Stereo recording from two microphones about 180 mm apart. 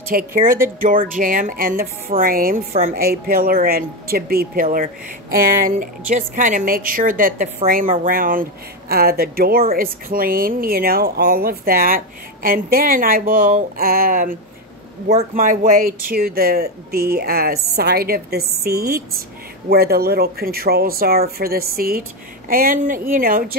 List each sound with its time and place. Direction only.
0.1 s a woman's voice: 50° right (ahead or behind)
15.3 s a woman's voice: 50° right (ahead or behind)